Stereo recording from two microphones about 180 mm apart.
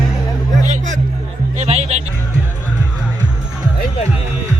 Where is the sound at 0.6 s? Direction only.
40° right (ahead or behind).